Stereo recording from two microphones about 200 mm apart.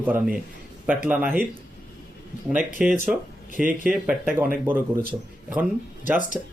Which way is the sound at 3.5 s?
45° right (ahead or behind).